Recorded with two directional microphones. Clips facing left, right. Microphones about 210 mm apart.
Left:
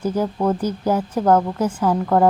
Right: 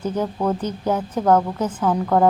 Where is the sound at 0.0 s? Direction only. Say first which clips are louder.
Left 2 dB; 10° left (ahead or behind).